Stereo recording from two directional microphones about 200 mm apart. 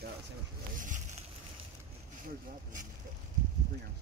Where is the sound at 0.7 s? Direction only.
40° right (ahead or behind).